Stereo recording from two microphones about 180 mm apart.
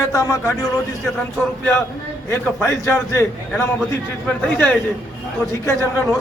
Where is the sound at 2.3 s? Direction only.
15° left (ahead or behind).